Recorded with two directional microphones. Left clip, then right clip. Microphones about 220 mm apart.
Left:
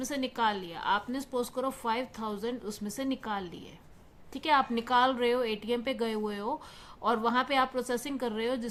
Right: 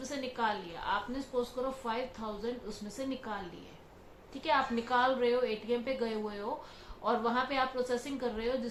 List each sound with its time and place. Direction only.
0.1 s a woman's voice: 40° left (ahead or behind)
4.4 s a woman's voice: 40° left (ahead or behind)